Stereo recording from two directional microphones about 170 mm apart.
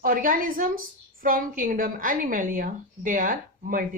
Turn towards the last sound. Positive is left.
turn(degrees=-55)  # may be behind; listen again after turning